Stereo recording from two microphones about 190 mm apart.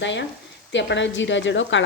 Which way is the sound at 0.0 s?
75° left (ahead or behind).